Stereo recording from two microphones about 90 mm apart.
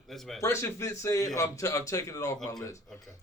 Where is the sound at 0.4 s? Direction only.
30° left (ahead or behind).